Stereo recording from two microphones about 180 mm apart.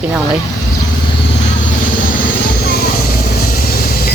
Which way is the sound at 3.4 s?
55° left (ahead or behind).